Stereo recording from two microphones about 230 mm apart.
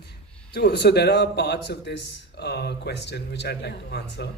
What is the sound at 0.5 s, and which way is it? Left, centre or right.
Speech, left.